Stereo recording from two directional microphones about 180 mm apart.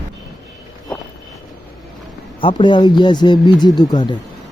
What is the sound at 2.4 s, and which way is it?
Speech, 25° left (ahead or behind).